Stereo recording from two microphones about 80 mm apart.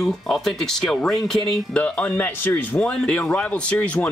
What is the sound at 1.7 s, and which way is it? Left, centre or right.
Speech, centre.